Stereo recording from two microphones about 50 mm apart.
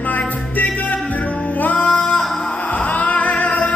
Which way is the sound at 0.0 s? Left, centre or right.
Left.